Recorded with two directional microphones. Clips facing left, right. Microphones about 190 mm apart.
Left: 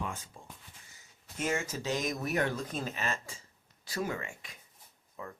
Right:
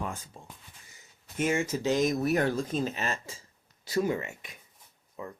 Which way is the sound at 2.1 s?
35° right (ahead or behind).